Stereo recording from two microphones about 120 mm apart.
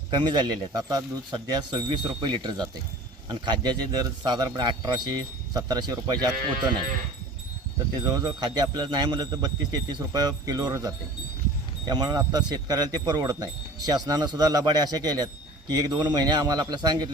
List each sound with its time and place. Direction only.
0.2 s speech: 35° right (ahead or behind)
8.0 s speech: 35° right (ahead or behind)